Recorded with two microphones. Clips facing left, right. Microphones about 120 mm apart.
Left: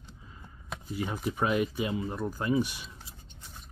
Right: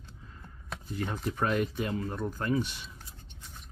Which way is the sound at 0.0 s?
10° left (ahead or behind).